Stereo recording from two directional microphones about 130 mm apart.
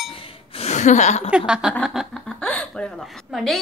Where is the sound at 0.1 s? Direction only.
45° left (ahead or behind); by 1.3 s 65° left (ahead or behind).